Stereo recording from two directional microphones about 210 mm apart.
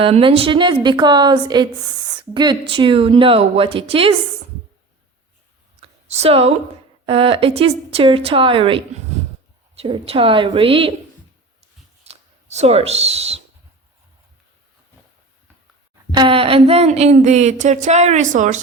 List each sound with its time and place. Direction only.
0.0 s a woman's voice: 25° right (ahead or behind)
5.8 s a sound: 30° right (ahead or behind)
7.0 s a woman's voice: 25° right (ahead or behind)
12.0 s speech: 30° right (ahead or behind)
16.1 s speech: 25° right (ahead or behind)